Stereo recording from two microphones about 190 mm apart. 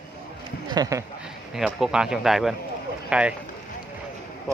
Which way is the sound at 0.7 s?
20° right (ahead or behind).